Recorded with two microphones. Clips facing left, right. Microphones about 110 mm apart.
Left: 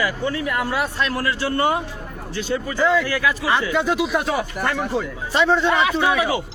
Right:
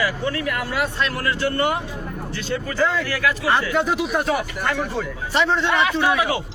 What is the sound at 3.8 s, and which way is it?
Speech, centre (ahead or behind).